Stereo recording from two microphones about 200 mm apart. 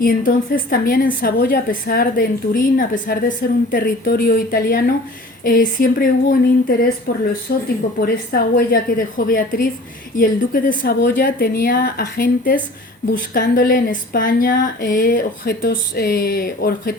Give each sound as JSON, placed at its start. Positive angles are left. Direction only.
{"t": 0.0, "sound": "a woman's voice", "side_deg": 45}
{"t": 7.1, "sound": "a woman's voice", "side_deg": 45}